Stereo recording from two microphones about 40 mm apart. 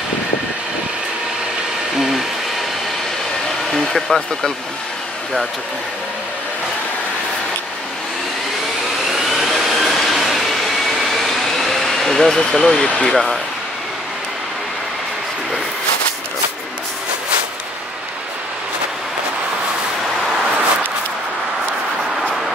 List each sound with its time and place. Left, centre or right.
2.0 s a sound: centre
3.7 s speech: centre
9.1 s vacuum cleaner: centre
12.3 s speech: centre
12.8 s speech: left
13.1 s speech: centre